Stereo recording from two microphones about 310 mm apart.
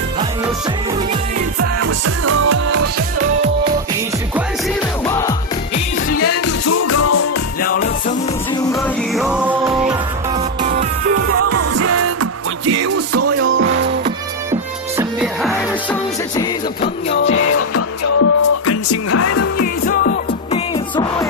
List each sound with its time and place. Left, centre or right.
1.8 s music: right
4.6 s music: centre
6.1 s music: left
7.6 s music: left
8.7 s music: centre
11.4 s music: right
14.0 s music: centre
17.1 s music: left
19.9 s music: left
20.7 s music: centre